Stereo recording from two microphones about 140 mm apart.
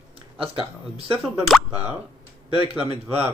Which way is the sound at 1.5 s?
10° right (ahead or behind).